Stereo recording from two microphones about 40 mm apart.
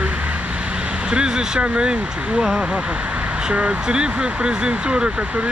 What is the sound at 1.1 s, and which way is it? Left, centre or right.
Speech, centre.